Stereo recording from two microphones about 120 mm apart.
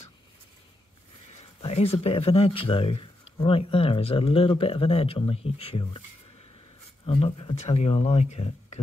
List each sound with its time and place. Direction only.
1.6 s speech: 60° left (ahead or behind)
7.1 s speech: 50° left (ahead or behind); by 8.8 s 70° left (ahead or behind)